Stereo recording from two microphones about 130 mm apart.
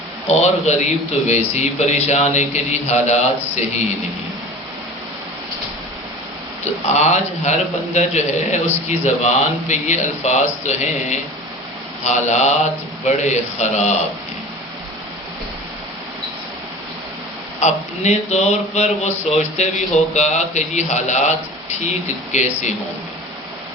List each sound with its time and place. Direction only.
0.3 s speech: 60° left (ahead or behind)
6.8 s speech: 60° left (ahead or behind)
17.6 s speech: 60° left (ahead or behind)